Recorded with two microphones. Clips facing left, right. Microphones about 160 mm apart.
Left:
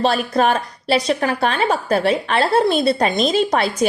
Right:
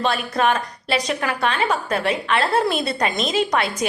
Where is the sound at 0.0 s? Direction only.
35° left (ahead or behind).